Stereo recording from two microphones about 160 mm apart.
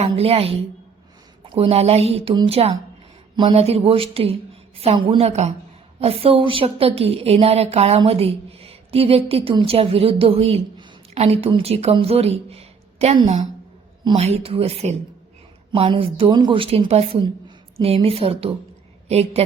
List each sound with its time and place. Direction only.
0.0 s a woman's voice: 40° right (ahead or behind)